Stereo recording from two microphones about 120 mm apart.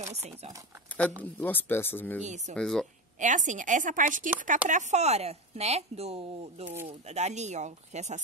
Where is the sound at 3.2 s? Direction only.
90° right.